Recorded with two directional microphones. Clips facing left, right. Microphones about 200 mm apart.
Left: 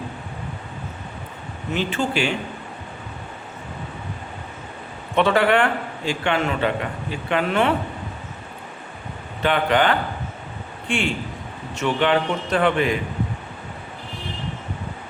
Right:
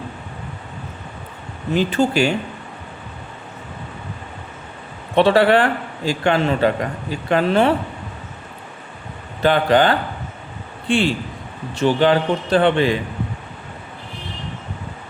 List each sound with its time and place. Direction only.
1.7 s a man's voice: 40° right (ahead or behind)
5.1 s a man's voice: 35° right (ahead or behind)
9.4 s a man's voice: 35° right (ahead or behind)